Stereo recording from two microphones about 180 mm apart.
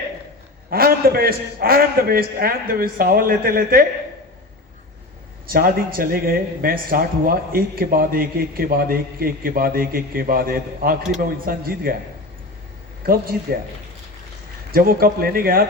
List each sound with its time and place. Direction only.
0.7 s a man's voice: 55° right (ahead or behind)
5.5 s a man's voice: 55° right (ahead or behind)
13.0 s a man's voice: 55° right (ahead or behind)
14.7 s a man's voice: 55° right (ahead or behind)